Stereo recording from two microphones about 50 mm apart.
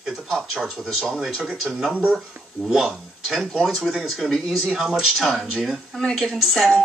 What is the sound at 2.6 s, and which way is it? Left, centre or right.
Speech, centre.